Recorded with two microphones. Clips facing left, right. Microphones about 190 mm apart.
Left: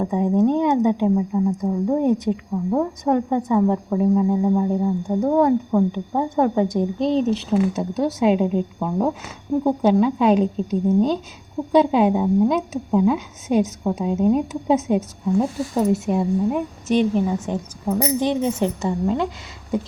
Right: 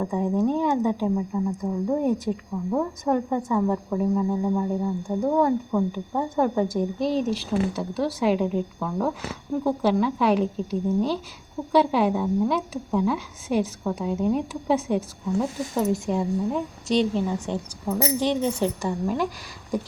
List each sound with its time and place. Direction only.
0.0 s a woman's voice: 20° left (ahead or behind)